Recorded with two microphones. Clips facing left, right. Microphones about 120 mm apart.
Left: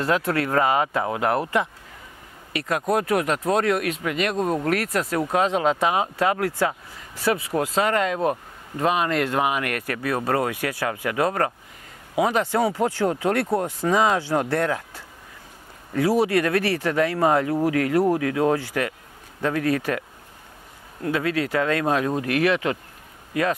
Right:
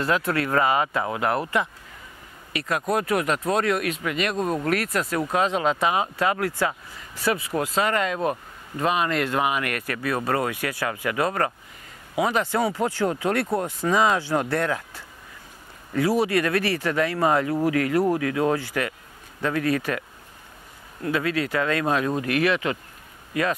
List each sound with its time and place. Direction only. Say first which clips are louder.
0.0 s speech: left 1 dB; 40° left (ahead or behind)
2.9 s speech: left 2 dB; 45° left (ahead or behind)
4.4 s speech: left 2 dB; 30° left (ahead or behind)
4.6 s speech: left 1 dB; 45° left (ahead or behind)
7.6 s speech: left 2 dB; 45° left (ahead or behind)